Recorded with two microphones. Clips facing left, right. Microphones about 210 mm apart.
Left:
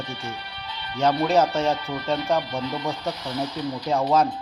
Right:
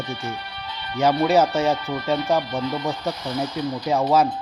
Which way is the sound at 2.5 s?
50° right (ahead or behind).